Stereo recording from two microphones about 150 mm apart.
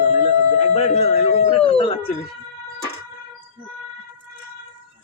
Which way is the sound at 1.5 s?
35° left (ahead or behind).